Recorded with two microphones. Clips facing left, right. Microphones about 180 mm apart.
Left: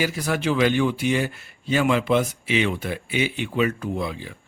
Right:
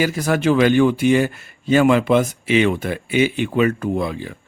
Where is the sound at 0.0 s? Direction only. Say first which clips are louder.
Right 6 dB; 45° right (ahead or behind).